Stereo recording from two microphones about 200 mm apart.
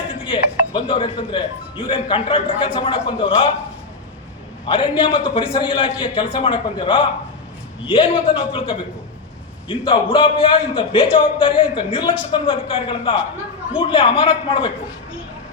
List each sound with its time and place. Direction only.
0.1 s speech: 25° left (ahead or behind)
4.6 s a man's voice: 25° left (ahead or behind)